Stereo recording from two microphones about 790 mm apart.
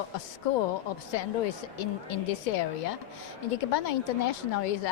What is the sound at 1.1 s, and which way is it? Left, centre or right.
Speech, left.